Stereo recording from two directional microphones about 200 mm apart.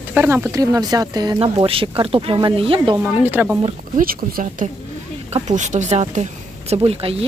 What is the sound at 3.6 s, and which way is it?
Speech, 45° right (ahead or behind).